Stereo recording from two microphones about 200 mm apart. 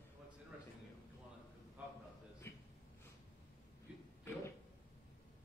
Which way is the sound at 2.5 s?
10° left (ahead or behind).